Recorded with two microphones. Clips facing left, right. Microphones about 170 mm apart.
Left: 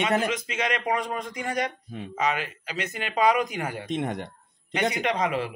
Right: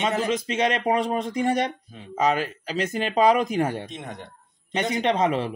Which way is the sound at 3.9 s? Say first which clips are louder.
Left 8 dB; 70° left (ahead or behind).